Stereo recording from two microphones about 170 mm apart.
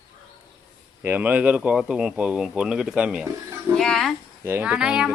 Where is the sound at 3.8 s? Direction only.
Centre (ahead or behind).